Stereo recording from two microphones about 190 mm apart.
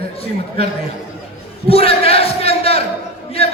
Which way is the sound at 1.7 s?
30° left (ahead or behind).